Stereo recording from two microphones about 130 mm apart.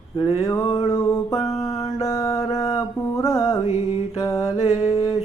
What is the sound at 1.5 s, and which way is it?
Mantra, 30° left (ahead or behind).